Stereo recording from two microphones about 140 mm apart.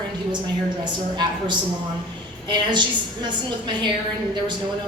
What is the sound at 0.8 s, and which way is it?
A woman's voice, 30° right (ahead or behind).